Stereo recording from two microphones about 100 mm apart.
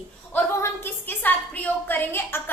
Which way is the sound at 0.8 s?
20° left (ahead or behind).